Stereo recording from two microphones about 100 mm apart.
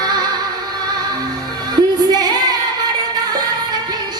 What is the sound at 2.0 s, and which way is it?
Female singing, 40° right (ahead or behind).